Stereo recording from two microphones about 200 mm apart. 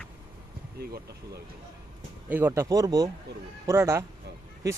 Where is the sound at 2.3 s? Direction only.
10° right (ahead or behind).